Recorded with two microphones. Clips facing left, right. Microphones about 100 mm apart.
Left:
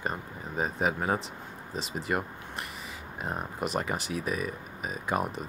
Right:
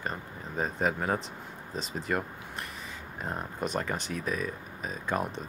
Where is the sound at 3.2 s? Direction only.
10° left (ahead or behind).